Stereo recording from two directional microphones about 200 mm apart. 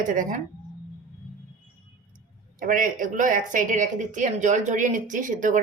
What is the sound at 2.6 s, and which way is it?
Speech, 45° right (ahead or behind).